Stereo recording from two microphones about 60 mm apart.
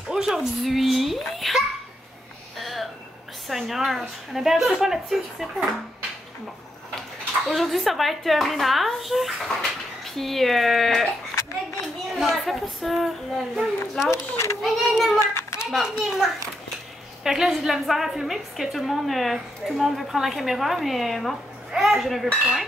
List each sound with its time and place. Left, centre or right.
0.1 s a woman's voice: centre
2.6 s a sound: centre
3.4 s a woman's voice: centre
7.0 s speech: centre
12.2 s a woman's voice: centre
14.1 s speech: left
14.6 s a woman's voice: centre
15.1 s a sound: left
15.7 s a woman's voice: centre